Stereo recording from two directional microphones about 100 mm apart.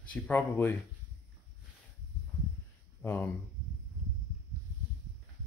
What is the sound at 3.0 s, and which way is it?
Speech, 20° left (ahead or behind).